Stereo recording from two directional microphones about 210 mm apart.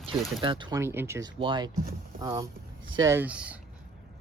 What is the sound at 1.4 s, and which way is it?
Speech, 20° right (ahead or behind).